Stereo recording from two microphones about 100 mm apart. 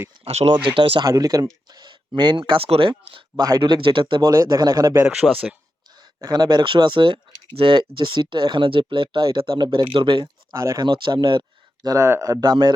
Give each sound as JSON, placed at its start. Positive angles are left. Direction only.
{"t": 0.3, "sound": "speech", "side_deg": -90}
{"t": 0.7, "sound": "speech", "side_deg": -60}
{"t": 1.0, "sound": "speech", "side_deg": -40}
{"t": 2.6, "sound": "speech", "side_deg": -65}
{"t": 3.3, "sound": "speech", "side_deg": -40}
{"t": 3.6, "sound": "speech", "side_deg": -55}
{"t": 4.2, "sound": "speech", "side_deg": -35}
{"t": 5.0, "sound": "speech", "side_deg": 0}
{"t": 6.0, "sound": "speech", "side_deg": -45}
{"t": 10.6, "sound": "speech", "side_deg": -35}
{"t": 10.8, "sound": "speech", "side_deg": -50}